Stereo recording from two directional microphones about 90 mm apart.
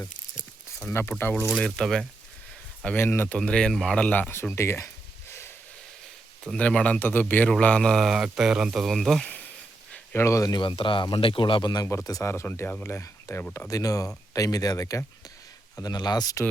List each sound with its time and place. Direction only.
0.3 s a sound: 15° left (ahead or behind)
1.5 s speech: 5° left (ahead or behind)
2.8 s speech: 25° left (ahead or behind)
3.3 s speech: 10° left (ahead or behind); by 4.9 s 30° left (ahead or behind)
6.5 s speech: 15° left (ahead or behind)
7.6 s speech: 10° left (ahead or behind)
10.2 s speech: 35° left (ahead or behind)
10.5 s speech: 65° left (ahead or behind)
12.0 s speech: 40° left (ahead or behind)
12.3 s speech: 30° left (ahead or behind); by 16.4 s 45° left (ahead or behind)